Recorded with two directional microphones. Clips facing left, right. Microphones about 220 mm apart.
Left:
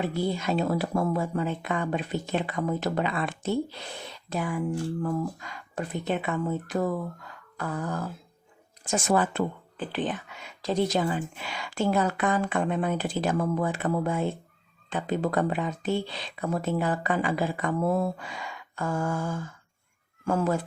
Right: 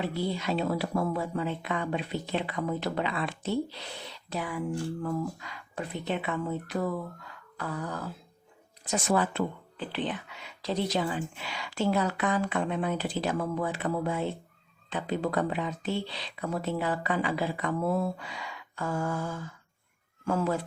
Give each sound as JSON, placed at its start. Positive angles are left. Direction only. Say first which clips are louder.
{"t": 0.0, "sound": "speech", "louder": "left 3 dB", "side_deg": 45}
{"t": 7.5, "sound": "a sound", "louder": "left 3 dB", "side_deg": 45}
{"t": 8.8, "sound": "speech", "louder": "left 2 dB", "side_deg": 50}